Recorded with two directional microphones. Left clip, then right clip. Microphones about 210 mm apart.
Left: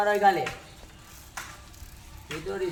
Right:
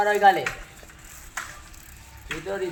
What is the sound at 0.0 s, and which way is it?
Speech, 35° right (ahead or behind).